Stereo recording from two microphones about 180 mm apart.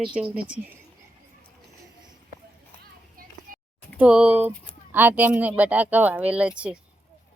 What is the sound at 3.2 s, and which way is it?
Child singing, 55° right (ahead or behind).